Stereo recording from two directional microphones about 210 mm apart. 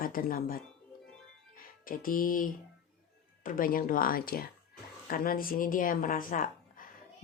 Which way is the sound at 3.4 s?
40° left (ahead or behind).